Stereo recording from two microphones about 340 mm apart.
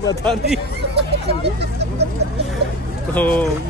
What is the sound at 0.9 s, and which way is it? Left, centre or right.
Speech, right.